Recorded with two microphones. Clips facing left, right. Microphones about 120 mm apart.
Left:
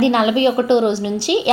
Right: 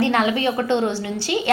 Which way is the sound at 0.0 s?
15° left (ahead or behind).